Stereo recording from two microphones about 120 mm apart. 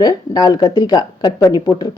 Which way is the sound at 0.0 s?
30° left (ahead or behind).